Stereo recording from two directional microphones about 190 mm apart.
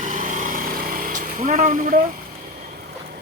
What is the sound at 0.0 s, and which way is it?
Vehicle, 40° right (ahead or behind).